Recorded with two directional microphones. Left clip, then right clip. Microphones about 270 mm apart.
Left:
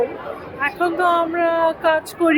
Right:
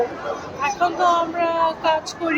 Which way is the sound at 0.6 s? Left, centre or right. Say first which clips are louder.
Even; left.